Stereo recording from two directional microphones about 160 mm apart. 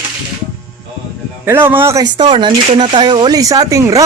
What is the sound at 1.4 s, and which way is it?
Speech, 15° right (ahead or behind).